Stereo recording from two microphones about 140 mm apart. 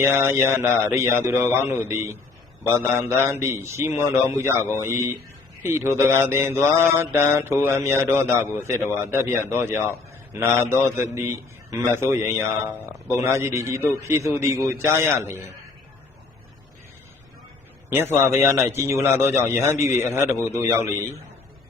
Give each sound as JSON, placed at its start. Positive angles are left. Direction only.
{"t": 0.0, "sound": "a man's voice", "side_deg": -20}
{"t": 3.2, "sound": "mantra", "side_deg": -20}
{"t": 5.6, "sound": "mantra", "side_deg": -15}
{"t": 10.3, "sound": "a man's voice", "side_deg": -20}
{"t": 17.8, "sound": "mantra", "side_deg": -15}
{"t": 18.7, "sound": "a man's voice", "side_deg": -20}